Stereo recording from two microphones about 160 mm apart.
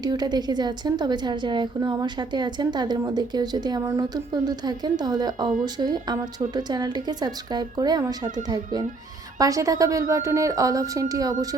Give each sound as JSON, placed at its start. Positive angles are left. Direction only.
{"t": 0.0, "sound": "a woman's voice", "side_deg": -25}